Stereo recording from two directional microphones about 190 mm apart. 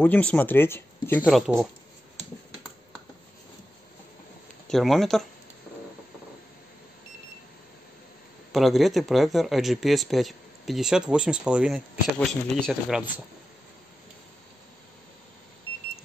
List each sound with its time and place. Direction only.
0.0 s speech: 10° left (ahead or behind)
4.6 s speech: centre (ahead or behind)
8.5 s speech: centre (ahead or behind)